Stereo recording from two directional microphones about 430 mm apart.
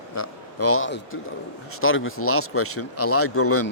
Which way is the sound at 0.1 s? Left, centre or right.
Left.